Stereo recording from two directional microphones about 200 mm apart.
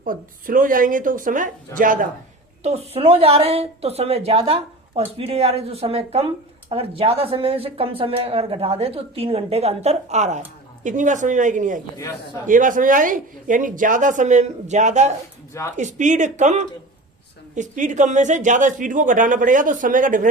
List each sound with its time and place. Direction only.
0.0 s speech: 45° right (ahead or behind)
2.6 s speech: 30° right (ahead or behind)
11.9 s a man's voice: 15° left (ahead or behind)
12.5 s speech: 40° right (ahead or behind)